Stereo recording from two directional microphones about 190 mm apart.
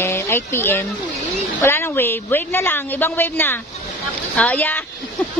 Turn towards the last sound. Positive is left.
turn(degrees=10)  # may be behind; listen again after turning